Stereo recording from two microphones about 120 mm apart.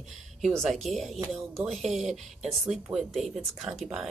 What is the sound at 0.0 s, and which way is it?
Speech, centre (ahead or behind).